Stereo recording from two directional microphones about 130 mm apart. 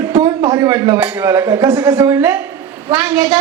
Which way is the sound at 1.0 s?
20° right (ahead or behind).